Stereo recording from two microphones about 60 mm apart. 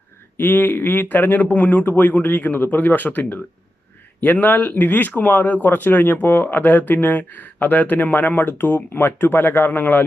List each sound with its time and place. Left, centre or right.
0.3 s speech: left